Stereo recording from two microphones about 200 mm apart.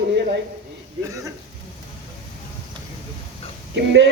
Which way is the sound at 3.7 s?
60° right (ahead or behind).